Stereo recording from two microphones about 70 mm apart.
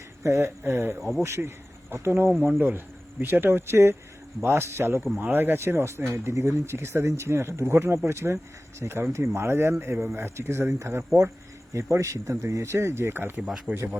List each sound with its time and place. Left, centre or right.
0.2 s speech: right
13.4 s speech: centre